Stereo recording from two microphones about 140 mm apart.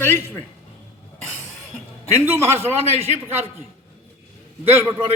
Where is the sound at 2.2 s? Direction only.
15° right (ahead or behind).